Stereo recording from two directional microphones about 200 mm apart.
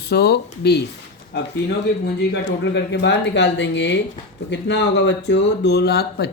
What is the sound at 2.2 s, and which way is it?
Speech, 60° left (ahead or behind).